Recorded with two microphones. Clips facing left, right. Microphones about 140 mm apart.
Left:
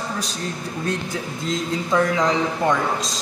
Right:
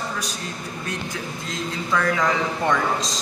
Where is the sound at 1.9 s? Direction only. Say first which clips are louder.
Left 2 dB; 20° left (ahead or behind).